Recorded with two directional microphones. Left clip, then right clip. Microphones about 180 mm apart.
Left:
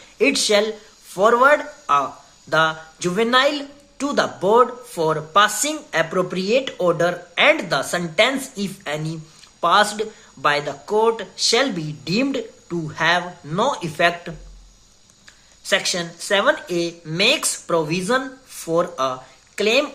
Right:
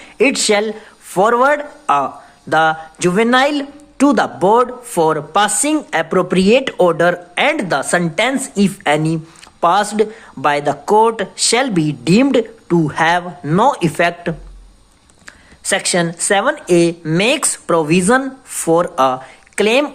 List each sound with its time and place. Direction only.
0.2 s speech: 45° right (ahead or behind)